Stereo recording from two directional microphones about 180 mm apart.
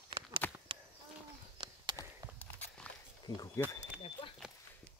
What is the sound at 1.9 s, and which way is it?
Walk, 10° left (ahead or behind).